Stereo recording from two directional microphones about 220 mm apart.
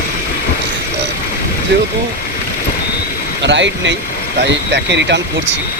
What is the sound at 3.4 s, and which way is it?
Speech, 55° right (ahead or behind).